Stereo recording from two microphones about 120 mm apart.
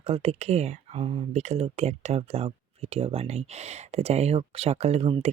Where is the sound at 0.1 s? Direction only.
55° right (ahead or behind).